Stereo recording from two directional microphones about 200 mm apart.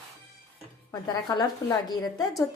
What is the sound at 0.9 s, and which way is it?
A woman's voice, 20° left (ahead or behind).